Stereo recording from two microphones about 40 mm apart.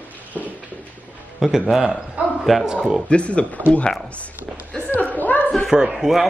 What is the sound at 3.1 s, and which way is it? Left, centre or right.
Speech, left.